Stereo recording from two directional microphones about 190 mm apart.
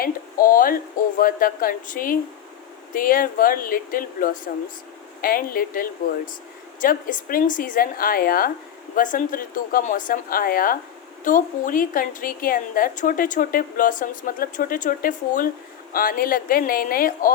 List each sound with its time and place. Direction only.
0.0 s a woman's voice: 50° left (ahead or behind)